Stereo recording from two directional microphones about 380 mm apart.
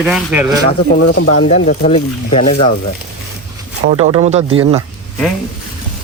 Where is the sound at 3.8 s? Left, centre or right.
Centre.